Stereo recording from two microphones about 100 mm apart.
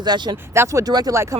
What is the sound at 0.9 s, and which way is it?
Speech, 45° right (ahead or behind).